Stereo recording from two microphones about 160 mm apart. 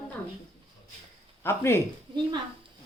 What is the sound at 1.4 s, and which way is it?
Speech, 15° left (ahead or behind).